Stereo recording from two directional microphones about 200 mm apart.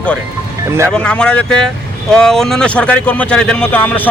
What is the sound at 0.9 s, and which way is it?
Speech, 5° left (ahead or behind).